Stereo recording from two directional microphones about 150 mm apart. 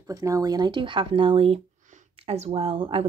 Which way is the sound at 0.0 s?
25° right (ahead or behind).